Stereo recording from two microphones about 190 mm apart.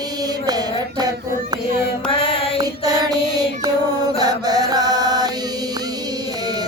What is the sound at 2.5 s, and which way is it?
Music, 20° right (ahead or behind).